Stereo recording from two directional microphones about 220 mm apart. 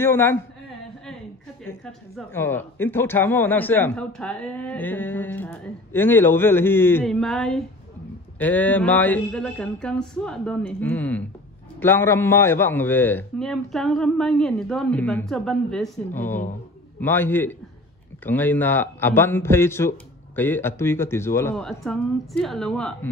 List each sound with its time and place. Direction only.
0.0 s speech: 10° left (ahead or behind)
1.6 s a man's voice: 5° left (ahead or behind)